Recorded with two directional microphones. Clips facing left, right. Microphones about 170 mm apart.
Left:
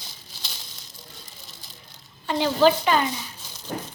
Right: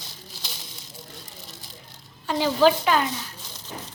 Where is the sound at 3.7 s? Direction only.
55° left (ahead or behind).